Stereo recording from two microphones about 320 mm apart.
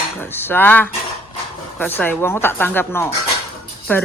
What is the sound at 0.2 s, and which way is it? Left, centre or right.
Speech, centre.